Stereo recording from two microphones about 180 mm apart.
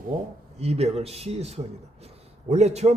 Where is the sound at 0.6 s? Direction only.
35° right (ahead or behind).